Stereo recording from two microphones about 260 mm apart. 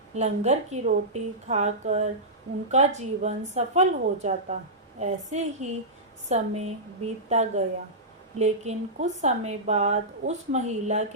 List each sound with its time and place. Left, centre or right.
0.2 s speech: right